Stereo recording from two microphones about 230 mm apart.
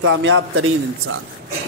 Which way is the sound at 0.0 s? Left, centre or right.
Right.